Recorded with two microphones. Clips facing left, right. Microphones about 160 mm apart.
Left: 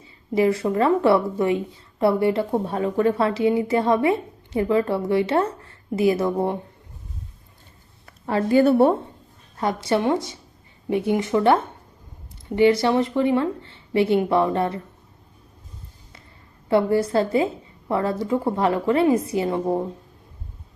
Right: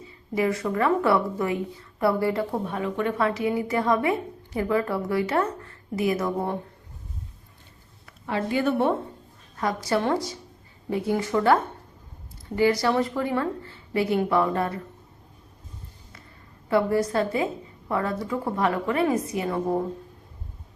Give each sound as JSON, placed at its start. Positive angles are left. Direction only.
{"t": 0.3, "sound": "speech", "side_deg": 30}
{"t": 8.0, "sound": "a woman's voice", "side_deg": 40}
{"t": 9.6, "sound": "speech", "side_deg": 25}
{"t": 16.6, "sound": "speech", "side_deg": 25}